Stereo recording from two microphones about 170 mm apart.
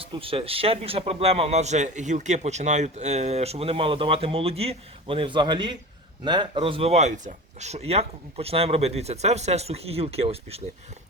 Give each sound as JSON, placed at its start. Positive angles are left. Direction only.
{"t": 0.0, "sound": "a man's voice", "side_deg": -30}